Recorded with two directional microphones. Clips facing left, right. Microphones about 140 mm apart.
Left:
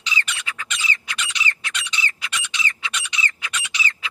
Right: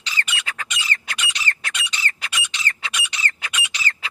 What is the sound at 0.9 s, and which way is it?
Squawk, 50° right (ahead or behind).